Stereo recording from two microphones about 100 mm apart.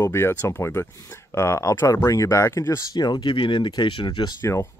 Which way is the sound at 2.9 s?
45° left (ahead or behind).